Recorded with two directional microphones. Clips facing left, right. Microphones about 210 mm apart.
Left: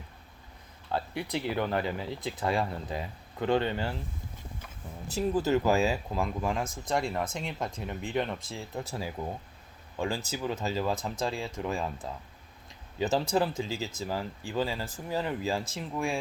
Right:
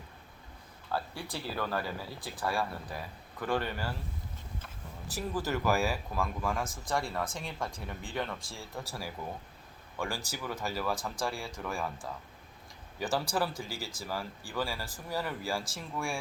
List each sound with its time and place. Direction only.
0.9 s speech: 20° left (ahead or behind)
5.1 s speech: 20° left (ahead or behind)
13.0 s speech: 20° left (ahead or behind)